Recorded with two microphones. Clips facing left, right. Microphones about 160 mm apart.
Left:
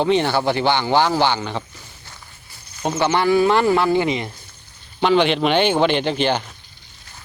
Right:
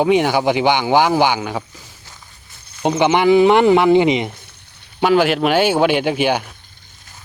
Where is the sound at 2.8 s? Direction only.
15° right (ahead or behind).